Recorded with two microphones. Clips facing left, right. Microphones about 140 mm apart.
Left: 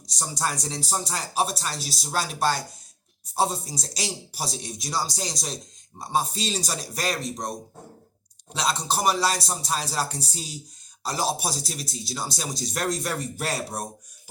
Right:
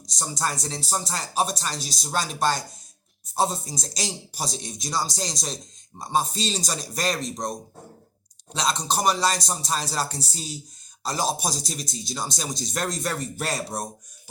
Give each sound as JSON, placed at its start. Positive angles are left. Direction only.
{"t": 0.2, "sound": "speech", "side_deg": 10}
{"t": 8.5, "sound": "speech", "side_deg": 10}